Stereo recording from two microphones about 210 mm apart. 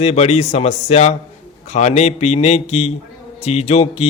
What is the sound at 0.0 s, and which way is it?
A man's voice, 30° left (ahead or behind).